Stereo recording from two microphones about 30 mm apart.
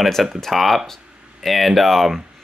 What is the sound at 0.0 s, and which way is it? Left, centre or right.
Speech, centre.